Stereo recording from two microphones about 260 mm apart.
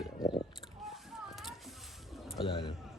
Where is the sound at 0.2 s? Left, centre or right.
Centre.